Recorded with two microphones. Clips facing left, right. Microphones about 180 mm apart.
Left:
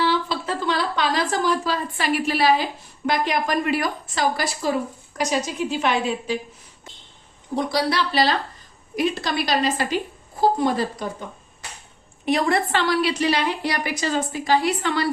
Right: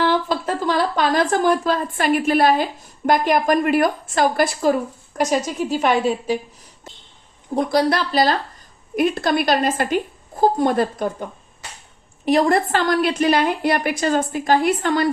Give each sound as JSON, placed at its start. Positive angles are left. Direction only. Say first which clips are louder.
{"t": 0.0, "sound": "a woman's voice", "louder": "right 3 dB", "side_deg": -50}
{"t": 7.5, "sound": "a woman's voice", "louder": "right 4 dB", "side_deg": -50}
{"t": 12.2, "sound": "a woman's voice", "louder": "right 4 dB", "side_deg": -40}